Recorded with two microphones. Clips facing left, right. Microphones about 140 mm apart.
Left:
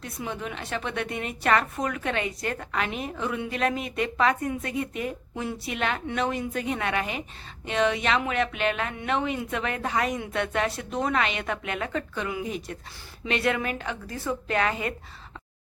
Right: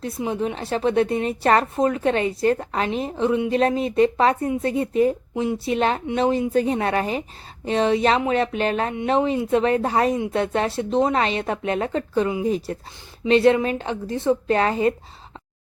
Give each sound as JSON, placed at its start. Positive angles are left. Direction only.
{"t": 0.0, "sound": "a woman's voice", "side_deg": -30}